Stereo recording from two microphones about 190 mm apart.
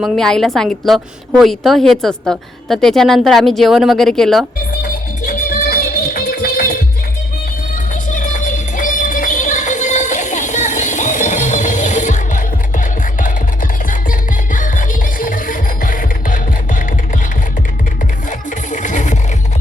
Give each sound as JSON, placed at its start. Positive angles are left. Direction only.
{"t": 0.0, "sound": "a woman's voice", "side_deg": 5}
{"t": 5.2, "sound": "music", "side_deg": 50}
{"t": 8.1, "sound": "music", "side_deg": 40}
{"t": 18.3, "sound": "music", "side_deg": 40}